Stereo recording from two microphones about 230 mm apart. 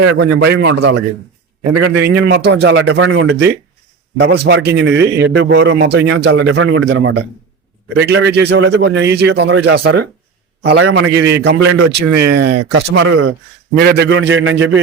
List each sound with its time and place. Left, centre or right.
0.0 s a man's voice: right
1.7 s a man's voice: right
2.2 s a man's voice: right